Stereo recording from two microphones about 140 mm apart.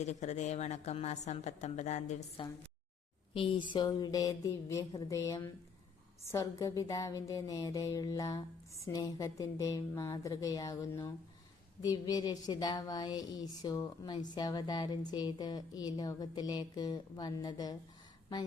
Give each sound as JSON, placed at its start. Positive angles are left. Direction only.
{"t": 0.0, "sound": "a woman's voice", "side_deg": 55}
{"t": 2.4, "sound": "a woman's voice", "side_deg": 40}